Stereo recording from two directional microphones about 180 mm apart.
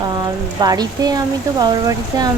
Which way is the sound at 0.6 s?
20° right (ahead or behind).